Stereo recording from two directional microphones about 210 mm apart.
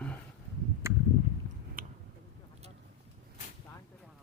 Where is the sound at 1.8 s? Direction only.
40° right (ahead or behind).